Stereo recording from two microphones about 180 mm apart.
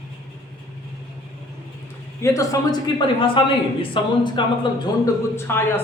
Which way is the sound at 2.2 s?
20° left (ahead or behind).